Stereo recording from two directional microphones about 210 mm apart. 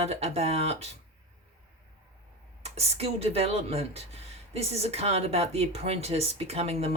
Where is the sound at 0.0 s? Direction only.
30° right (ahead or behind).